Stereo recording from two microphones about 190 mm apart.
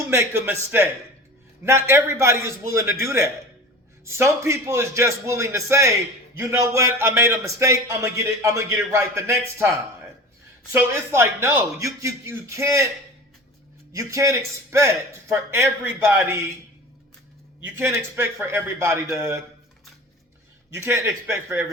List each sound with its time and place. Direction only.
0.1 s a man's voice: 10° right (ahead or behind)
10.7 s a man's voice: 15° right (ahead or behind)
13.9 s a man's voice: 15° right (ahead or behind)
17.6 s a man's voice: 10° right (ahead or behind)
20.7 s a man's voice: 15° right (ahead or behind)